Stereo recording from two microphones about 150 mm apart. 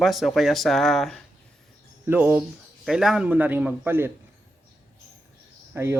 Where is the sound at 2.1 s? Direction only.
10° right (ahead or behind).